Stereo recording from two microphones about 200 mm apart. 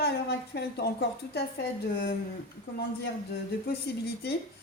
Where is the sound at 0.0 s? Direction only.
55° left (ahead or behind).